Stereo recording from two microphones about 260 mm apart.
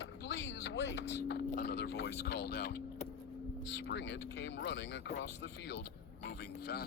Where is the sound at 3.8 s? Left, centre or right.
Left.